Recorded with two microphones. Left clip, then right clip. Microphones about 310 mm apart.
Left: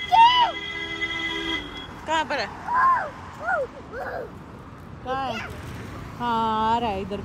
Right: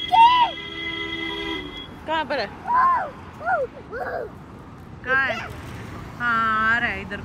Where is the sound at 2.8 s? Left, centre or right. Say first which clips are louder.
Even; right.